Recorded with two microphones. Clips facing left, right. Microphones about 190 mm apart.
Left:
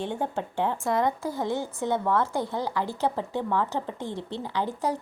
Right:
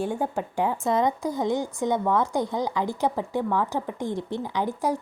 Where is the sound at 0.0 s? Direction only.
10° right (ahead or behind).